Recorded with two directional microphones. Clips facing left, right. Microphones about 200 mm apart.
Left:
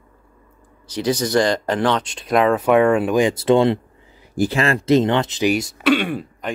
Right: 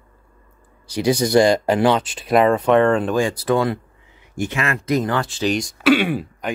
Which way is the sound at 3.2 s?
25° left (ahead or behind).